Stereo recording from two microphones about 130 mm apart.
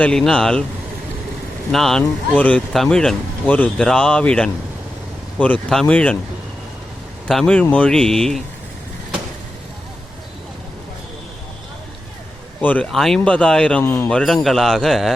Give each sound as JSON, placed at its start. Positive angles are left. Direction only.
{"t": 0.0, "sound": "speech", "side_deg": 5}
{"t": 1.7, "sound": "speech", "side_deg": 0}
{"t": 7.3, "sound": "speech", "side_deg": 5}
{"t": 12.6, "sound": "speech", "side_deg": 10}
{"t": 13.8, "sound": "a man's voice", "side_deg": 20}
{"t": 14.1, "sound": "speech", "side_deg": 5}